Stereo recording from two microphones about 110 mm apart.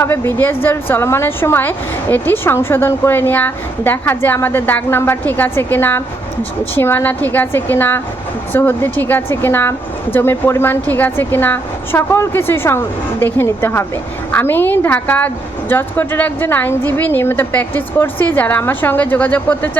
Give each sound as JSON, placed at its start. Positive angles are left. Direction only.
{"t": 0.0, "sound": "a woman's voice", "side_deg": 20}